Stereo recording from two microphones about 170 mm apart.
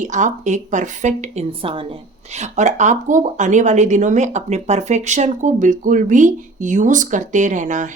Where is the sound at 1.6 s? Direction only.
30° right (ahead or behind).